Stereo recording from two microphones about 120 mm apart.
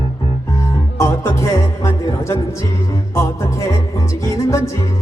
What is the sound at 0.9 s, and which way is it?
Music, 25° left (ahead or behind).